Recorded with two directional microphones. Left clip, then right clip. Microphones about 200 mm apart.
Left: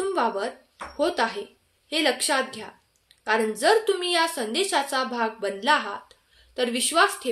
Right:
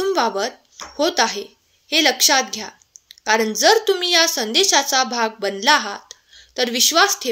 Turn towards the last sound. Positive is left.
turn(degrees=-40)  # may be behind; listen again after turning